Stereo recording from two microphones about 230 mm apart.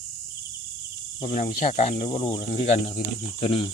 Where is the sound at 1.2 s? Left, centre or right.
Left.